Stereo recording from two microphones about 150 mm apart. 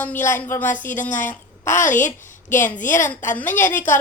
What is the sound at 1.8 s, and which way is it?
Speech, 55° left (ahead or behind).